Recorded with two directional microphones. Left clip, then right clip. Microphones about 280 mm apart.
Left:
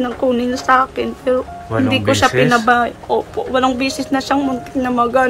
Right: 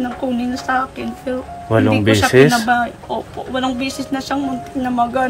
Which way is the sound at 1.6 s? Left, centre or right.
Right.